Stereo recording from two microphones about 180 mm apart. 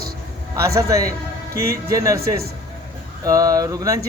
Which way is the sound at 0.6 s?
15° right (ahead or behind).